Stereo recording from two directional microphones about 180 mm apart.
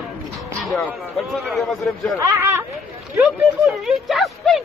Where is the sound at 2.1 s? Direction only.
15° right (ahead or behind).